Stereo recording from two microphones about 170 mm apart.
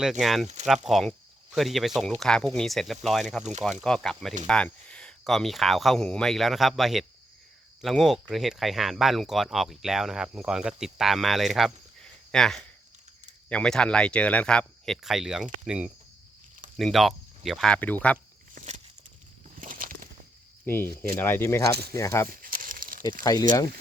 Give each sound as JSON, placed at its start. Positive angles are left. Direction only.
{"t": 0.0, "sound": "speech", "side_deg": 0}
{"t": 18.5, "sound": "a sound", "side_deg": -40}
{"t": 19.5, "sound": "a sound", "side_deg": -55}
{"t": 20.7, "sound": "speech", "side_deg": 10}
{"t": 22.3, "sound": "crumpling", "side_deg": -55}
{"t": 23.2, "sound": "speech", "side_deg": 20}